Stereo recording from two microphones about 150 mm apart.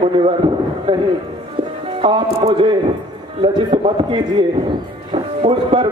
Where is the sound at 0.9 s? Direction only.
35° right (ahead or behind).